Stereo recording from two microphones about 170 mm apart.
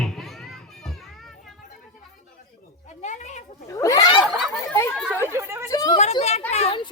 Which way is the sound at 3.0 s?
45° left (ahead or behind).